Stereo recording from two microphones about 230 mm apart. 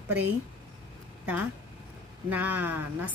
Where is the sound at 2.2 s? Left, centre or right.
Centre.